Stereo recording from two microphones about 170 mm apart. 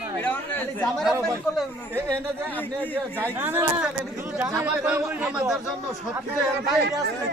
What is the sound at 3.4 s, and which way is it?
A man's voice, 10° right (ahead or behind).